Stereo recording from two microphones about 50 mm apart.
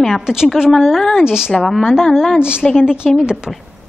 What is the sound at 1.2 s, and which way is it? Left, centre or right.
Speech, centre.